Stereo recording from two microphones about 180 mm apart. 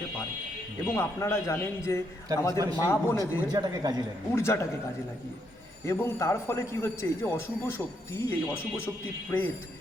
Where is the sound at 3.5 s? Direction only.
20° right (ahead or behind).